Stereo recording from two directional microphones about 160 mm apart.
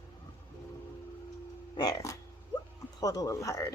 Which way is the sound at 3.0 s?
20° left (ahead or behind).